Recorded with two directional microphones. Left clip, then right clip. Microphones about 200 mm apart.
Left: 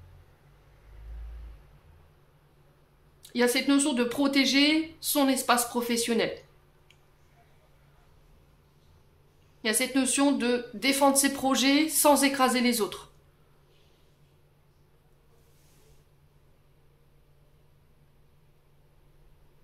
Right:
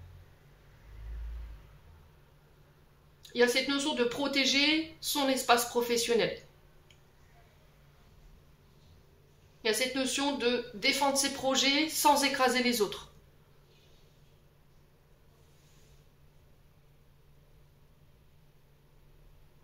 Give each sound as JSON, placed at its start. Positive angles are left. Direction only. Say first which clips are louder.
{"t": 3.2, "sound": "speech", "louder": "left 1 dB", "side_deg": 45}
{"t": 9.6, "sound": "speech", "louder": "left 2 dB", "side_deg": 45}